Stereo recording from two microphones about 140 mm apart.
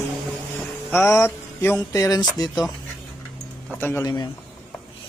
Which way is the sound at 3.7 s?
15° left (ahead or behind).